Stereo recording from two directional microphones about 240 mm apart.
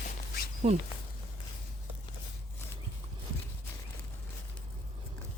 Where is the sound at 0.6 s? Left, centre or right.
Right.